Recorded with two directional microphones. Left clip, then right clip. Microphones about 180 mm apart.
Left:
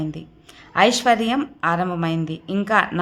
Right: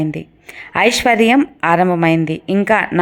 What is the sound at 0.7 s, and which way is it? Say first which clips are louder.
A woman's voice: right 3 dB; 40° right (ahead or behind).